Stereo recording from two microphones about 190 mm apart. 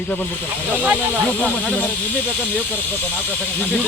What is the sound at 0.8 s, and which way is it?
Speech, 5° right (ahead or behind).